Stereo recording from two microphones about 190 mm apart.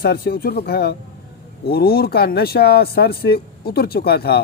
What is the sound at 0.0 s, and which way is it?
Speech, 55° left (ahead or behind).